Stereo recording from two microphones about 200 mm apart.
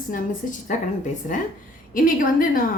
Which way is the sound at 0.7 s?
35° left (ahead or behind).